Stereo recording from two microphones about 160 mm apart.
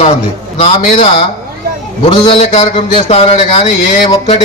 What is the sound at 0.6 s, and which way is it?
A man's voice, 40° left (ahead or behind).